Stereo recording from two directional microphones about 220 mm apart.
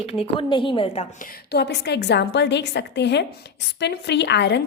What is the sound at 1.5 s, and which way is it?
A woman's voice, 50° left (ahead or behind).